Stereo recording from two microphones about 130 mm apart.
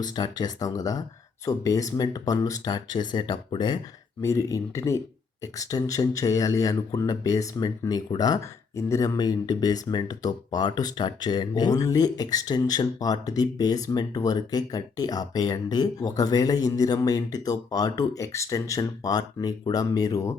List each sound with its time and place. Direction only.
0.0 s speech: 30° left (ahead or behind)
4.2 s speech: 20° left (ahead or behind)